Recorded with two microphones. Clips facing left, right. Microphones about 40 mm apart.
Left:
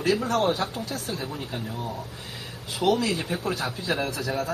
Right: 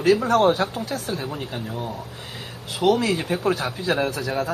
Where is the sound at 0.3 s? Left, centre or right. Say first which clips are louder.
Right 6 dB; right.